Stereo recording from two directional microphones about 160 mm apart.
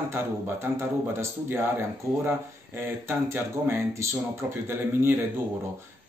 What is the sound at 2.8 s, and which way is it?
Speech, 15° right (ahead or behind).